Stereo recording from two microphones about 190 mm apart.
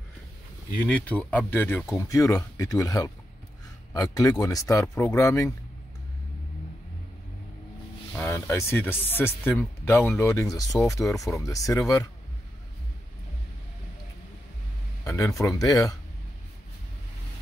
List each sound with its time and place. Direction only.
0.7 s speech: 10° left (ahead or behind)
8.2 s speech: 15° left (ahead or behind)
15.0 s speech: 15° left (ahead or behind)